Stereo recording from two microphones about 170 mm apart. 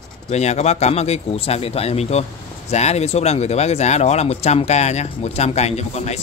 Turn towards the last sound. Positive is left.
turn(degrees=40)  # may be behind; listen again after turning